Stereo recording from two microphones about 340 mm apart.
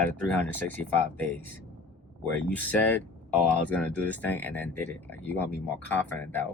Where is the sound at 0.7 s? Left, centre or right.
Centre.